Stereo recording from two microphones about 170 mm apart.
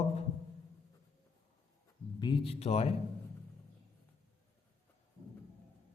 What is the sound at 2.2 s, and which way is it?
Speech, 30° left (ahead or behind).